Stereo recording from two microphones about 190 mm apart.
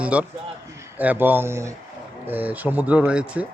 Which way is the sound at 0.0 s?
5° right (ahead or behind).